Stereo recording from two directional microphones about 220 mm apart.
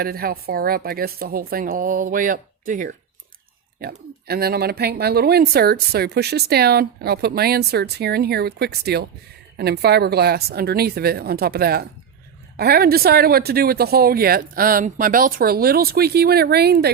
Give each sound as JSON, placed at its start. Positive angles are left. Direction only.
{"t": 0.0, "sound": "speech", "side_deg": -45}
{"t": 4.3, "sound": "speech", "side_deg": -45}